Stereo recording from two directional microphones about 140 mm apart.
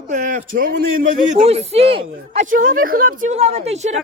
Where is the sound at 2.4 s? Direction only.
75° right (ahead or behind).